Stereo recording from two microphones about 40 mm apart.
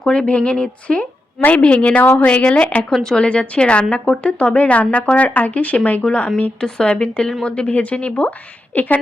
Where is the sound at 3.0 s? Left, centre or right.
Left.